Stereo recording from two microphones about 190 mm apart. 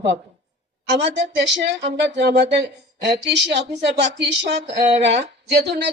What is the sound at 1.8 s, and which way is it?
Speech, 65° right (ahead or behind).